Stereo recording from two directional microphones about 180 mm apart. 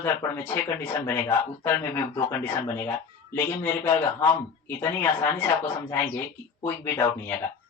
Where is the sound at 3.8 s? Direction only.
15° left (ahead or behind).